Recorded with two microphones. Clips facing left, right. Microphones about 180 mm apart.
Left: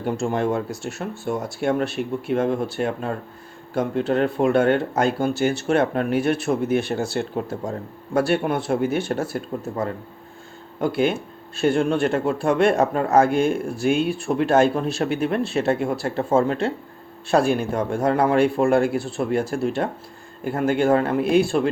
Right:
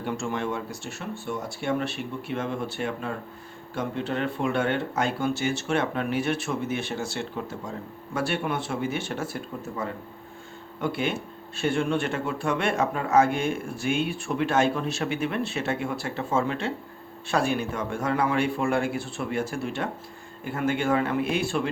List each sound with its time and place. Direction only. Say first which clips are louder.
0.0 s speech: left 6 dB; 40° left (ahead or behind); by 7.1 s 60° left (ahead or behind)
7.2 s speech: left 7 dB; 45° left (ahead or behind)